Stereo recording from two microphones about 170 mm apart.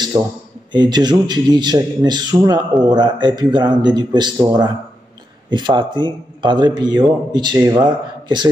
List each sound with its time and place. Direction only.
0.7 s a man's voice: 25° right (ahead or behind)